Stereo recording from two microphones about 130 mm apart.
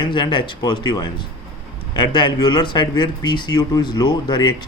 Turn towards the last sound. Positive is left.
turn(degrees=35)  # may be behind; listen again after turning